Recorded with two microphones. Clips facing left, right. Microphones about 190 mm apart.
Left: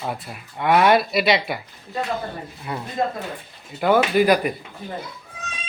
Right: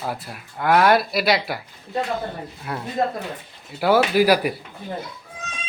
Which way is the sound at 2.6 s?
Centre (ahead or behind).